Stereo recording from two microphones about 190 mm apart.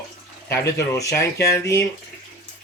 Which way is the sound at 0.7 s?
15° left (ahead or behind).